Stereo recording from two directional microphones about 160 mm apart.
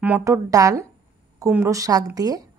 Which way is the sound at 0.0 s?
15° right (ahead or behind).